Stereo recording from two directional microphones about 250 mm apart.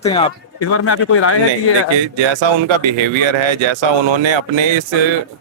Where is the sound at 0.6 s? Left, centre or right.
Left.